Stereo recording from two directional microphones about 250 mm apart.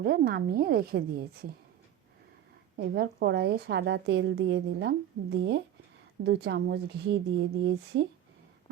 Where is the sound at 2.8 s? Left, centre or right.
Right.